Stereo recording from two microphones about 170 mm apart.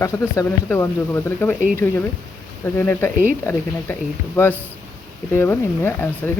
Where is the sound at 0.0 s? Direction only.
20° left (ahead or behind).